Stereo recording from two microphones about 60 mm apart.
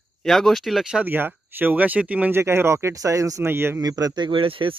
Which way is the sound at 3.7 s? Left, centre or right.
Right.